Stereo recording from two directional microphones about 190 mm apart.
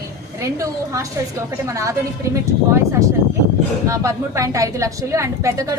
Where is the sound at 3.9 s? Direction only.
15° right (ahead or behind).